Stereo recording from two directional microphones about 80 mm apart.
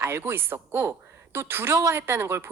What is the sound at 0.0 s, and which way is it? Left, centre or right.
A woman's voice, right.